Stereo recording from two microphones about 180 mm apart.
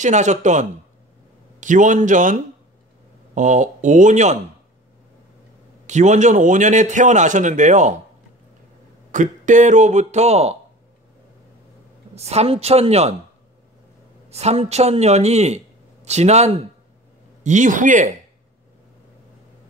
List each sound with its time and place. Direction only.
0.0 s a man's voice: 40° right (ahead or behind)
5.9 s a man's voice: 40° right (ahead or behind)
9.1 s speech: 45° right (ahead or behind)
12.2 s speech: 35° right (ahead or behind)
14.3 s a man's voice: 35° right (ahead or behind)